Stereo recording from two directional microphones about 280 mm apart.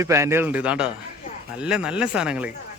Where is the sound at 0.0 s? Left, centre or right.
Centre.